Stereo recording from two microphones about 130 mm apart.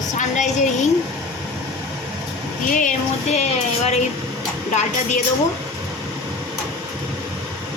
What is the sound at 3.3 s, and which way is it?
Speech, 55° left (ahead or behind).